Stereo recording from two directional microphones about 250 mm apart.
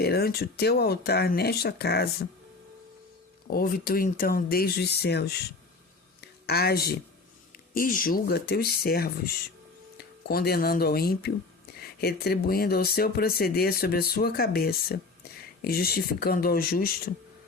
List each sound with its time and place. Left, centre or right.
0.0 s speech: left
3.4 s speech: left
6.4 s speech: left